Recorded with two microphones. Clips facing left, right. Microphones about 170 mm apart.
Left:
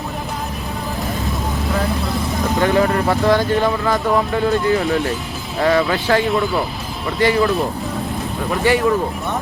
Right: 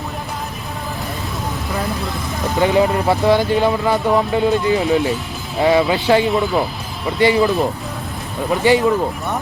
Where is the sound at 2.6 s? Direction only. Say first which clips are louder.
Right 2 dB; 15° right (ahead or behind).